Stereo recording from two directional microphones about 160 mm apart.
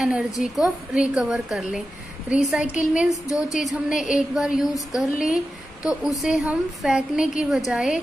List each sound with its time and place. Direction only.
0.0 s a woman's voice: 5° right (ahead or behind)